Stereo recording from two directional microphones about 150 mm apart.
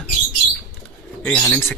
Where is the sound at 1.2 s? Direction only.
5° left (ahead or behind).